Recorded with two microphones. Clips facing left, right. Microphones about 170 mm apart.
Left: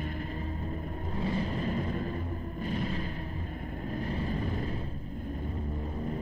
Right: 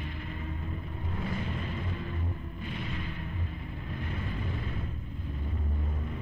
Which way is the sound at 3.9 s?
35° left (ahead or behind).